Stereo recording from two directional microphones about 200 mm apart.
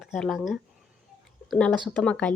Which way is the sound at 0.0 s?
Centre (ahead or behind).